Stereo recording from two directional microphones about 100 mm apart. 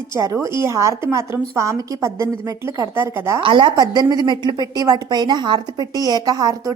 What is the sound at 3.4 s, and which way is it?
A woman's voice, 50° right (ahead or behind).